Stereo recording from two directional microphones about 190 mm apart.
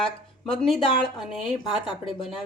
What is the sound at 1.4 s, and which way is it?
Speech, centre (ahead or behind).